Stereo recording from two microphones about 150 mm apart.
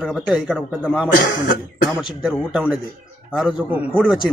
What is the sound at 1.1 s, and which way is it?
Speech, 70° left (ahead or behind).